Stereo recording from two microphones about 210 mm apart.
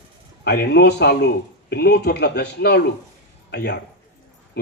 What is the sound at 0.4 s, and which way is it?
A man's voice, 50° left (ahead or behind).